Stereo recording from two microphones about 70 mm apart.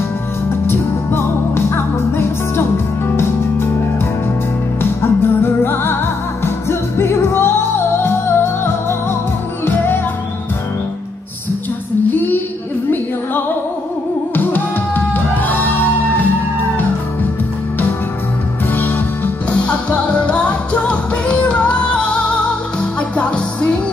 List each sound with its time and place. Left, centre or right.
0.7 s music: left
12.1 s female singing: left
14.3 s music: left
18.7 s music: left
19.6 s music: centre